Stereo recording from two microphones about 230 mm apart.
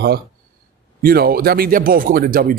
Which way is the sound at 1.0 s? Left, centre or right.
Right.